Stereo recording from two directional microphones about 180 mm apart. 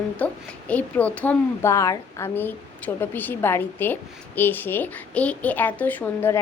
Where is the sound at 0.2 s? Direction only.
10° left (ahead or behind).